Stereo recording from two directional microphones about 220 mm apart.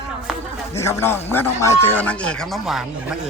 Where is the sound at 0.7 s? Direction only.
10° left (ahead or behind).